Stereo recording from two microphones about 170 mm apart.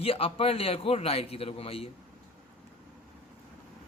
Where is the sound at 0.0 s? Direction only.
35° left (ahead or behind).